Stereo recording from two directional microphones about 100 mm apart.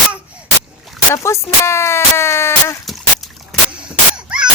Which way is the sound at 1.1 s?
30° left (ahead or behind).